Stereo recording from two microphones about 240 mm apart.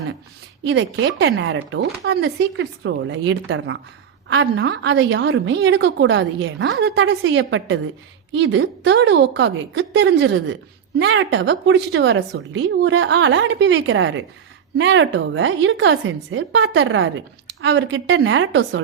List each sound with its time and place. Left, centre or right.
0.6 s a woman's voice: right